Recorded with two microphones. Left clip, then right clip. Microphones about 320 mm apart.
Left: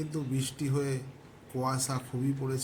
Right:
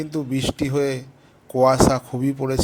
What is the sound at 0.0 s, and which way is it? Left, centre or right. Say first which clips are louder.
Speech: right 11 dB; right.